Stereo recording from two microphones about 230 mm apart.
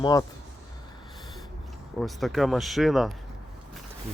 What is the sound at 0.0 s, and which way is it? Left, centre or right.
Speech, centre.